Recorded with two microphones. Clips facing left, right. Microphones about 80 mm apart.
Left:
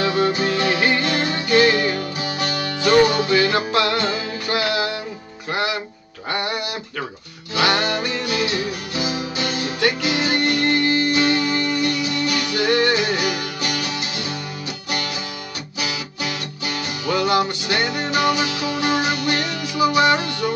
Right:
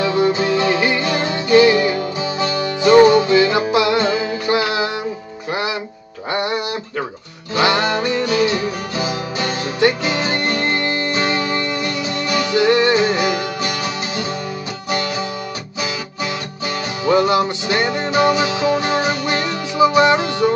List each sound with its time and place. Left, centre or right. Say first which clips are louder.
0.0 s music: right 3 dB; right
16.6 s music: right 6 dB; right